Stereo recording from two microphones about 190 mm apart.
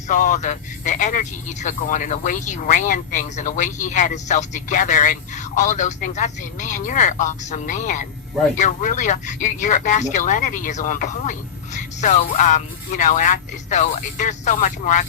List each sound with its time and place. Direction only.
0.1 s speech: 40° left (ahead or behind)